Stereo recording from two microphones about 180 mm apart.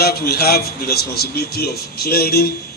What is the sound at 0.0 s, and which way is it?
Speech, 60° left (ahead or behind).